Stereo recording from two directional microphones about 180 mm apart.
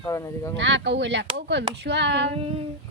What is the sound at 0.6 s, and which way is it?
Speech, 75° right (ahead or behind).